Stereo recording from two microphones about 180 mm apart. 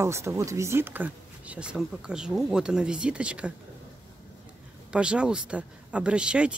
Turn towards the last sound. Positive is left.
turn(degrees=-5)  # may be behind; listen again after turning